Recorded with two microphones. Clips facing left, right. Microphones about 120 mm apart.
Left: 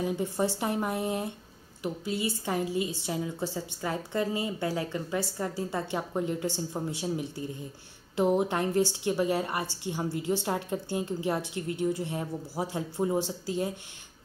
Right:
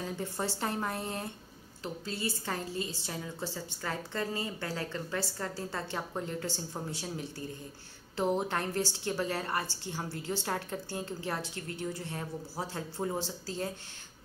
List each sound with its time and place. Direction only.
0.0 s a woman's voice: 15° left (ahead or behind)